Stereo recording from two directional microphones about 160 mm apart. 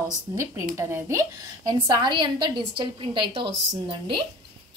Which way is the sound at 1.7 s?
25° right (ahead or behind).